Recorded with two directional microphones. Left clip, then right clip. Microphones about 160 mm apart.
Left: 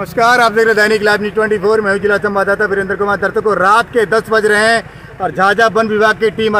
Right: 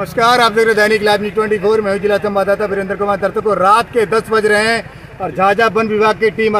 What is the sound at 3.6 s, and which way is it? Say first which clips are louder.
Speech: even; 5° left (ahead or behind).